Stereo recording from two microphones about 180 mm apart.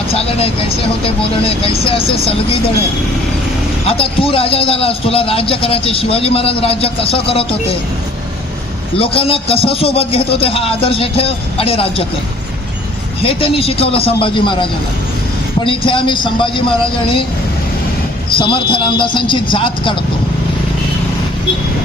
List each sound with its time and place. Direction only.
0.1 s vehicle: 35° left (ahead or behind)
1.0 s a man's voice: 30° left (ahead or behind)
3.8 s a man's voice: 30° left (ahead or behind)
9.0 s a man's voice: 30° left (ahead or behind)
13.2 s a man's voice: 30° left (ahead or behind)
18.3 s a man's voice: 30° left (ahead or behind)